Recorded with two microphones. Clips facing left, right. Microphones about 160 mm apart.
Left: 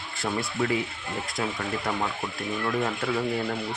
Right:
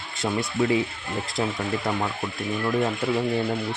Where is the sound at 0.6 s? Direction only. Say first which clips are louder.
Right 6 dB; 25° right (ahead or behind).